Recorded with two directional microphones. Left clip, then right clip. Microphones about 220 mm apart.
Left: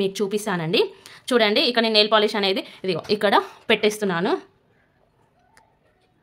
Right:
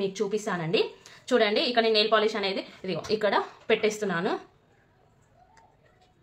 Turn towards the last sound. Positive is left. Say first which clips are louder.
# left 5 dB
turn(degrees=50)  # may be behind; listen again after turning